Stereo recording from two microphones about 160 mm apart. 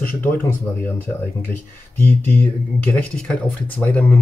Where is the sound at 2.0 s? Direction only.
10° left (ahead or behind).